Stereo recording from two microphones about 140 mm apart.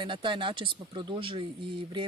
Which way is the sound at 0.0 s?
35° right (ahead or behind).